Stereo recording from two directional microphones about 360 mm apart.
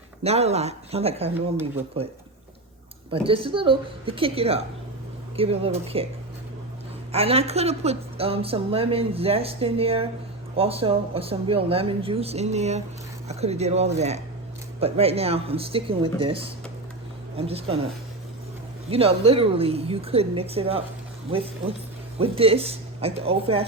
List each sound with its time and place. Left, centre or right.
0.2 s a woman's voice: centre
1.3 s speech: centre
3.1 s a woman's voice: centre
7.1 s a woman's voice: centre
18.9 s a woman's voice: centre